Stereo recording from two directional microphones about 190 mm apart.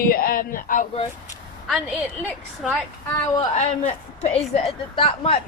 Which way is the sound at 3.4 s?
35° left (ahead or behind).